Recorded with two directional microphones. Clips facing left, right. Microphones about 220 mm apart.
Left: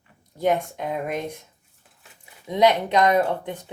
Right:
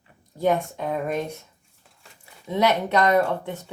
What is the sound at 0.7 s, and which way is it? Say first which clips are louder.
Speech: right 1 dB; 15° left (ahead or behind).